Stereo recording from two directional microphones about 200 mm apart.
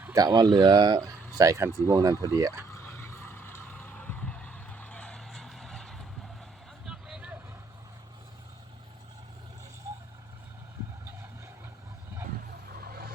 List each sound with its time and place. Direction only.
0.0 s speech: 15° right (ahead or behind)
3.0 s vehicle: 10° left (ahead or behind)
6.8 s a sound: centre (ahead or behind)
12.8 s vehicle: 50° right (ahead or behind)